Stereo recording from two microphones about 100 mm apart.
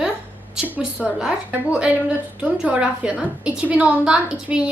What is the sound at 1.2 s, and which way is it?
A woman's voice, 10° right (ahead or behind).